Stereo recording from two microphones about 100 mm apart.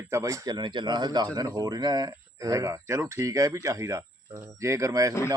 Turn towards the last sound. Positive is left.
turn(degrees=-35)  # may be behind; listen again after turning